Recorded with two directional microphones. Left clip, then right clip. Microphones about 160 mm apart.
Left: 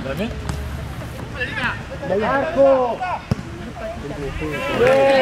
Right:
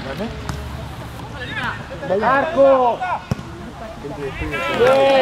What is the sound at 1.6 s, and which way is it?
Speech, 5° right (ahead or behind).